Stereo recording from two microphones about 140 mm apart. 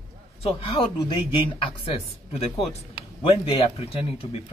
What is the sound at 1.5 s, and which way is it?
Speech, 45° left (ahead or behind).